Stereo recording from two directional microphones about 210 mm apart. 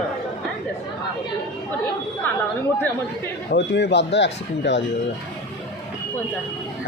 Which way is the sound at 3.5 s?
55° left (ahead or behind).